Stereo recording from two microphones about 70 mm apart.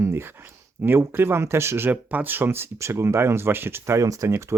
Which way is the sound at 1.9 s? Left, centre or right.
Right.